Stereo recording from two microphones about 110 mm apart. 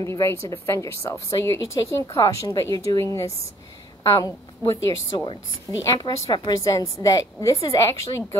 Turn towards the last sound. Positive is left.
turn(degrees=30)  # may be behind; listen again after turning